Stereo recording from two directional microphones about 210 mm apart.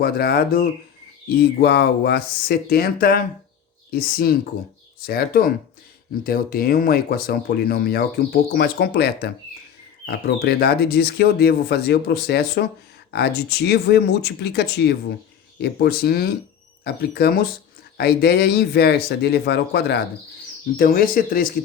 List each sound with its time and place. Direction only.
0.0 s speech: 45° left (ahead or behind)